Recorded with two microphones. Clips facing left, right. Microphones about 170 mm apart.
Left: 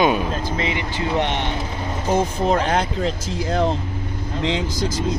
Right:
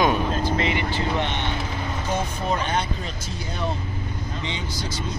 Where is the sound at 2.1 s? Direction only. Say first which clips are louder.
Left 8 dB; 90° left.